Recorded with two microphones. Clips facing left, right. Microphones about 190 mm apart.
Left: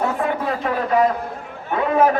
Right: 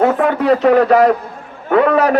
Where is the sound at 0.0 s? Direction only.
80° right.